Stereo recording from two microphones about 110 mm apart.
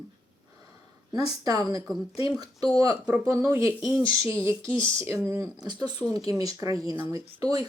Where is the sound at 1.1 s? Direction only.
35° right (ahead or behind).